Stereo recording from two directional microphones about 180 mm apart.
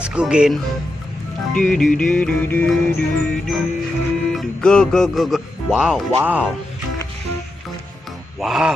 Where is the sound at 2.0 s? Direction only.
5° left (ahead or behind).